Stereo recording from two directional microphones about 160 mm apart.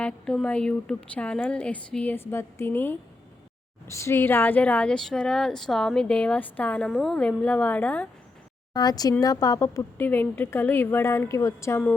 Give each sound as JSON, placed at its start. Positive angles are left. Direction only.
{"t": 0.0, "sound": "a woman's voice", "side_deg": 5}
{"t": 8.7, "sound": "a woman's voice", "side_deg": 25}